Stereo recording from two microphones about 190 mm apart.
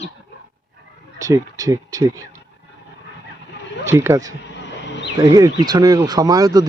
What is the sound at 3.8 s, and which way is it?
Speech, 15° right (ahead or behind).